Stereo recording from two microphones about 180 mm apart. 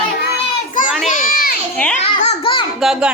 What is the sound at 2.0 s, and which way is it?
Speech, 35° left (ahead or behind).